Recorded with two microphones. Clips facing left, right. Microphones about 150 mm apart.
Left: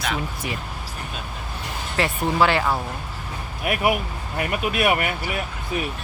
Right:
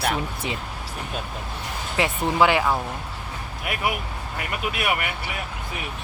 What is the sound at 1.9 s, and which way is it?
Speech, 15° right (ahead or behind).